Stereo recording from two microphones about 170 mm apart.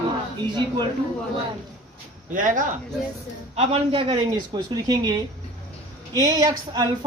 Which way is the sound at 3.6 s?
35° right (ahead or behind).